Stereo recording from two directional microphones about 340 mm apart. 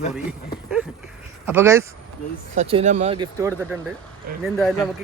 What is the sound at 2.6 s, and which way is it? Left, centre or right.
Speech, centre.